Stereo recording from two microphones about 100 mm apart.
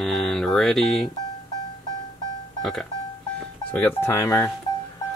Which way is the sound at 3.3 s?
15° left (ahead or behind).